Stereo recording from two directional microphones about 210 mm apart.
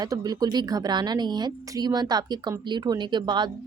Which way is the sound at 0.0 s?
15° right (ahead or behind).